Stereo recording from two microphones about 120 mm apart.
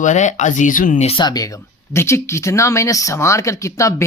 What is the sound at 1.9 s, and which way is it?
Speech, 20° left (ahead or behind).